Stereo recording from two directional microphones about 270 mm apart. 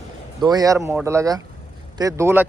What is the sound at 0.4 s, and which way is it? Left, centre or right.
A man's voice, centre.